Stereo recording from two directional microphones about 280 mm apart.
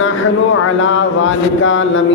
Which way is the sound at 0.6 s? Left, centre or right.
Left.